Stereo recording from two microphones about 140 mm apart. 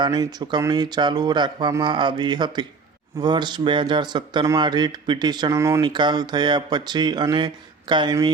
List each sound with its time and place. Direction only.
0.0 s speech: 30° right (ahead or behind)
5.8 s speech: 35° right (ahead or behind)